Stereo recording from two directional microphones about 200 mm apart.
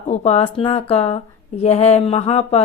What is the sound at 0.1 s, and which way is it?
A woman's voice, 30° left (ahead or behind).